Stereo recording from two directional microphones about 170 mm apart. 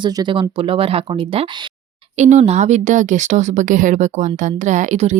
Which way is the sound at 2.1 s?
45° right (ahead or behind).